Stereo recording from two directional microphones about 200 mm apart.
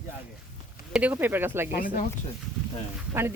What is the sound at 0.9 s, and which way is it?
Speech, 10° right (ahead or behind).